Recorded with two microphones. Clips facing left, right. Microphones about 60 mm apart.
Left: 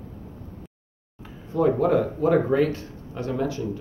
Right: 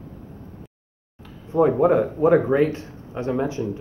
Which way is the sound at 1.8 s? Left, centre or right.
Right.